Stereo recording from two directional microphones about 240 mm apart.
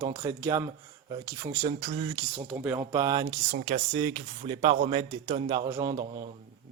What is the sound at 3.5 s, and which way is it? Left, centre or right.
Speech, right.